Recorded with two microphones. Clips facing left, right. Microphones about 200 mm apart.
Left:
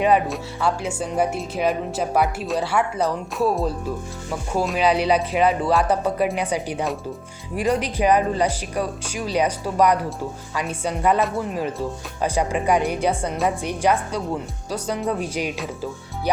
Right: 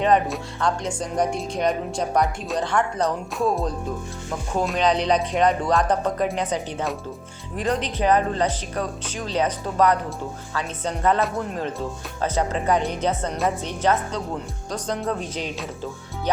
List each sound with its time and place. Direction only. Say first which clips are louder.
0.0 s speech: left 1 dB; 10° left (ahead or behind)